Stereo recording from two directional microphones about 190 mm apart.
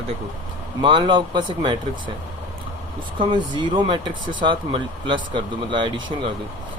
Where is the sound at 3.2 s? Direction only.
25° right (ahead or behind).